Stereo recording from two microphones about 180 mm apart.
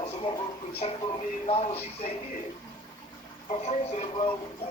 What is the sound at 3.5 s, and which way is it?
Speech, 35° left (ahead or behind).